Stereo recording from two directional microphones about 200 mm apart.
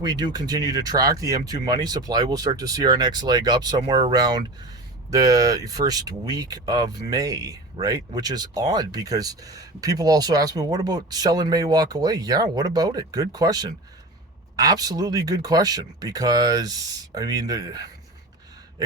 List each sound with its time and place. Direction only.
0.0 s speech: 20° right (ahead or behind)